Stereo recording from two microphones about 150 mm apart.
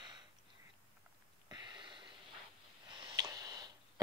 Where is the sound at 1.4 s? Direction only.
30° right (ahead or behind).